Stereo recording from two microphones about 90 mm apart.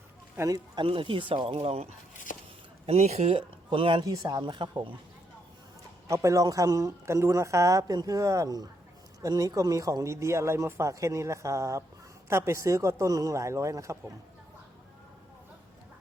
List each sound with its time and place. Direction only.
0.3 s speech: 40° right (ahead or behind)
0.8 s speech: 80° right
2.9 s speech: 80° right
4.0 s speech: 40° right (ahead or behind)
4.4 s speech: 60° right (ahead or behind)
6.1 s speech: 35° right (ahead or behind)